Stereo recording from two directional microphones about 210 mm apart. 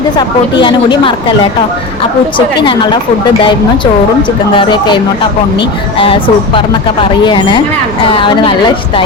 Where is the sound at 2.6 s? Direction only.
20° left (ahead or behind).